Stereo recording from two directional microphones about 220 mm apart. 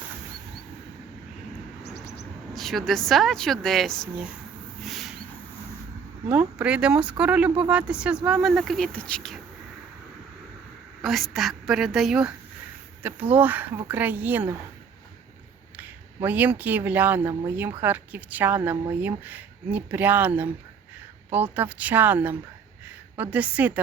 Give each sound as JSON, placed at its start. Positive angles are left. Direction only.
{"t": 2.6, "sound": "speech", "side_deg": 0}
{"t": 4.8, "sound": "a sound", "side_deg": 0}
{"t": 6.2, "sound": "speech", "side_deg": -5}
{"t": 11.0, "sound": "speech", "side_deg": 0}
{"t": 15.8, "sound": "speech", "side_deg": -10}